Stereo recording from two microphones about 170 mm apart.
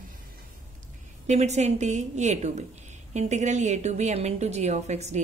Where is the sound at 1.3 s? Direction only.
40° right (ahead or behind).